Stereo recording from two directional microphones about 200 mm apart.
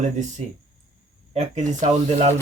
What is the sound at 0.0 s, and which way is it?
Speech, 35° right (ahead or behind).